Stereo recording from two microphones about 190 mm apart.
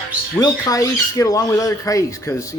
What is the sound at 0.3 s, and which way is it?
Speech, 20° left (ahead or behind).